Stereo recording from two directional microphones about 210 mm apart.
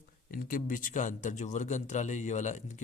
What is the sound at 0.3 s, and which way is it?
Speech, 40° left (ahead or behind).